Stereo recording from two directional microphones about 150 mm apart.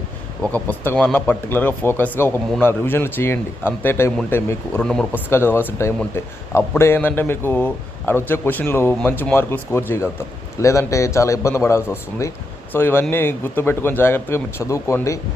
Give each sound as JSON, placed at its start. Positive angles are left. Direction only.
{"t": 0.4, "sound": "a man's voice", "side_deg": 10}
{"t": 4.8, "sound": "speech", "side_deg": 5}
{"t": 5.3, "sound": "a man's voice", "side_deg": 15}